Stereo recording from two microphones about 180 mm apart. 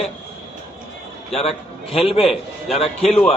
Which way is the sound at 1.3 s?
35° left (ahead or behind).